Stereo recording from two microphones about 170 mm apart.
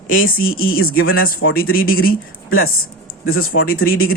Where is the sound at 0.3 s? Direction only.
60° left (ahead or behind).